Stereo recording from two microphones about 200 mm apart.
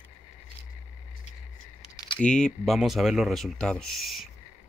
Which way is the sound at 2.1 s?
5° left (ahead or behind).